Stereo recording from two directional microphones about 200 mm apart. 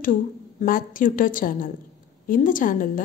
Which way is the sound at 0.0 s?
40° left (ahead or behind).